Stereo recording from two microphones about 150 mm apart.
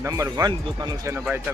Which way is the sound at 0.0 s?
20° right (ahead or behind).